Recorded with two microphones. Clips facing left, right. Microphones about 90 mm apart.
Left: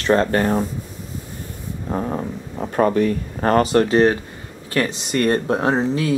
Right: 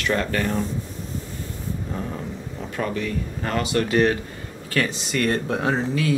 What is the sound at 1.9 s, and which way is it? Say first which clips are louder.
Speech: left 6 dB; 40° left (ahead or behind).